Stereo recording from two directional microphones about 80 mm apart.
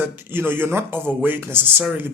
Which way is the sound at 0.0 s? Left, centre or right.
Right.